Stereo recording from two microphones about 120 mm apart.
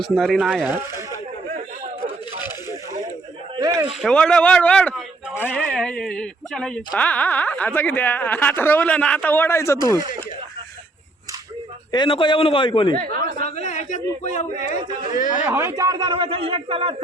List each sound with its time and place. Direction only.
0.0 s speech: centre (ahead or behind)
0.7 s speech: 20° right (ahead or behind)
3.6 s speech: 30° right (ahead or behind)
4.0 s speech: 10° left (ahead or behind); by 9.7 s 25° left (ahead or behind)
11.9 s a man's voice: 40° left (ahead or behind)
13.6 s a man's voice: 90° left
15.4 s speech: 20° right (ahead or behind)
15.7 s speech: 35° right (ahead or behind)